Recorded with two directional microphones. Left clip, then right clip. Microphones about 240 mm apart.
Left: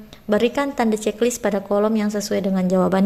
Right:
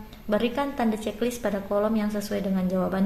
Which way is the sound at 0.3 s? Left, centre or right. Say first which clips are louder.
Left 6 dB; left.